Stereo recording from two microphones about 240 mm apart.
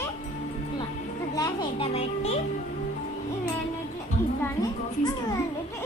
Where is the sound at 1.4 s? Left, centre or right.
Left.